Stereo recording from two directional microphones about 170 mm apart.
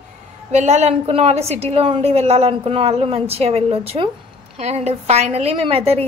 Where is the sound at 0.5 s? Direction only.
40° right (ahead or behind).